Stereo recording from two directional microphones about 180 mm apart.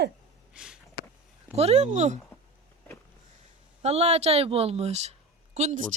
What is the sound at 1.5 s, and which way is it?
Speech, 35° right (ahead or behind).